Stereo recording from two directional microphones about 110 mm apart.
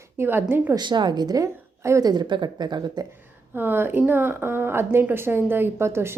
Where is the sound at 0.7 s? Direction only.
40° right (ahead or behind); by 2.1 s 25° right (ahead or behind).